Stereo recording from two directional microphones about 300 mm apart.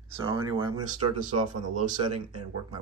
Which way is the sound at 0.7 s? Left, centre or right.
Right.